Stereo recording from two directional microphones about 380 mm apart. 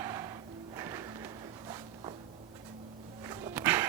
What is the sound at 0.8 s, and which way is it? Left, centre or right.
Music, centre.